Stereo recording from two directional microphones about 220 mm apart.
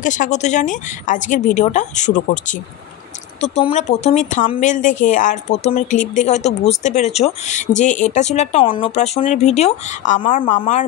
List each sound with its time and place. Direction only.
0.0 s speech: 35° left (ahead or behind)
3.5 s speech: 30° left (ahead or behind)